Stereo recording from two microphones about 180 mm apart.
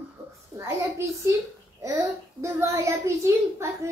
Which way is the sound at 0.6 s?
15° right (ahead or behind).